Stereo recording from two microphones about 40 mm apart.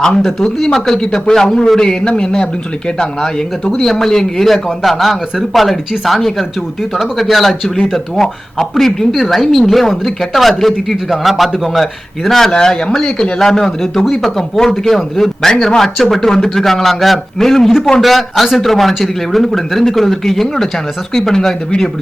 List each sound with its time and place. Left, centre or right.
0.2 s a man's voice: centre
12.5 s speech: centre
13.5 s a man's voice: centre